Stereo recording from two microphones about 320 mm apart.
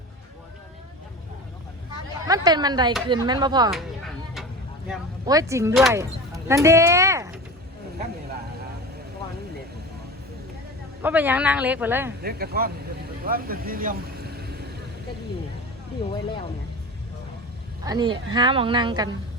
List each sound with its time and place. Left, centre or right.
2.2 s speech: centre
5.2 s speech: centre
11.0 s a woman's voice: centre
12.2 s speech: right
13.2 s vehicle: right
17.8 s speech: centre